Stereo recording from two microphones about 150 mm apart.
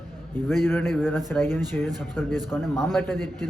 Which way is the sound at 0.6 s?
15° left (ahead or behind).